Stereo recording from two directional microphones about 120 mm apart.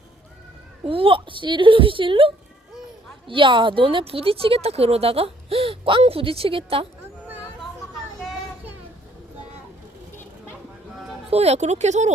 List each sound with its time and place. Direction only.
0.9 s speech: 50° right (ahead or behind)
11.3 s speech: 60° right (ahead or behind)